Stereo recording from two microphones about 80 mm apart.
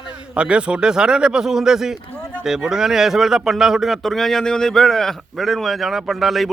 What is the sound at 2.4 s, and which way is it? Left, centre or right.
A man's voice, centre.